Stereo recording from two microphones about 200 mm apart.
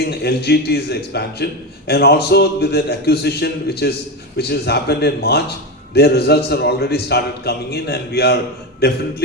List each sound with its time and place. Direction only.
0.0 s a man's voice: 55° left (ahead or behind)